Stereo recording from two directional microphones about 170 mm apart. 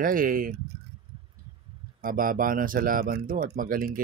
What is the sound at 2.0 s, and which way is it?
Speech, 55° right (ahead or behind).